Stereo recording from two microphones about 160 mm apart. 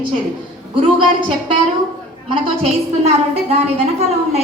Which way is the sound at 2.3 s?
40° right (ahead or behind).